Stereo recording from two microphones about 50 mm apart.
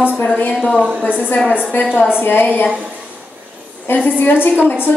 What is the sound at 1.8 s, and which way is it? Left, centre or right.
Speech, left.